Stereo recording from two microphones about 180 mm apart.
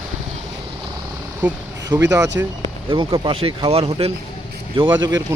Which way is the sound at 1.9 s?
20° right (ahead or behind).